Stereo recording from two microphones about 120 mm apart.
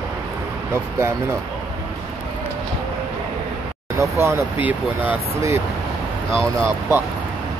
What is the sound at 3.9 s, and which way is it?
Speech, 25° right (ahead or behind).